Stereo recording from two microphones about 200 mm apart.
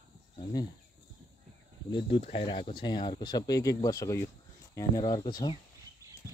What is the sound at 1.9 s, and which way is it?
Speech, 25° left (ahead or behind).